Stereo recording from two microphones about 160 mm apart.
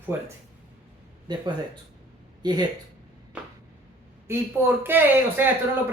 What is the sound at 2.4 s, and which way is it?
Speech, 25° right (ahead or behind).